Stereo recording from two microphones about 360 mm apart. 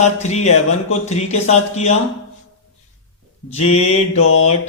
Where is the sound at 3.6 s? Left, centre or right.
Left.